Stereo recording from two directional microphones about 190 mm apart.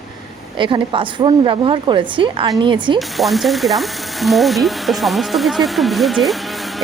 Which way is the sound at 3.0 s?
Centre (ahead or behind).